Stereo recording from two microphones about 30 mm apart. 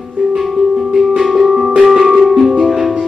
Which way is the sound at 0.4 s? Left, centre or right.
Centre.